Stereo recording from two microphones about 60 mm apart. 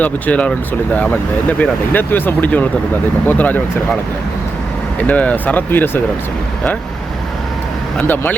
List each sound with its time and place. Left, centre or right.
0.0 s speech: left
1.9 s speech: left
4.9 s speech: left
7.9 s speech: left